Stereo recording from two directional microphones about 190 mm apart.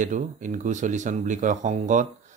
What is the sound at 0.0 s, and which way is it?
Speech, 40° right (ahead or behind).